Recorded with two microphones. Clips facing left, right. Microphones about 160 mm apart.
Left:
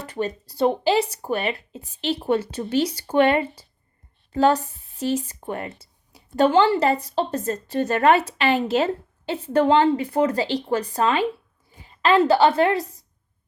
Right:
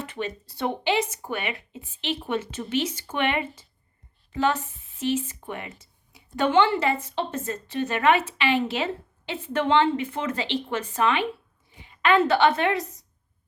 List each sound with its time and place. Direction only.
0.0 s a woman's voice: 40° left (ahead or behind)